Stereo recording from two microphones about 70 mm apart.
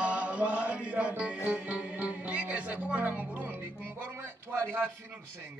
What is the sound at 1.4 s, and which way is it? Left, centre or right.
Speech, centre.